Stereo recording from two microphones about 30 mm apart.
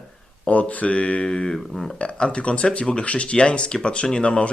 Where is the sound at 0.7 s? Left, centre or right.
Left.